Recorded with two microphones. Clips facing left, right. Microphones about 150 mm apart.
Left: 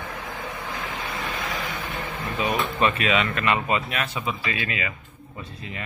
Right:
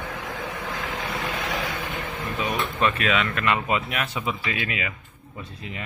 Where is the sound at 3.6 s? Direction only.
10° right (ahead or behind).